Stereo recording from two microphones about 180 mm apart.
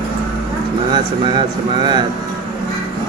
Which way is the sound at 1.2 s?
25° right (ahead or behind).